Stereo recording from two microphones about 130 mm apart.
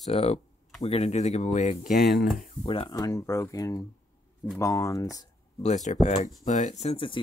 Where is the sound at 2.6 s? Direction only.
45° left (ahead or behind).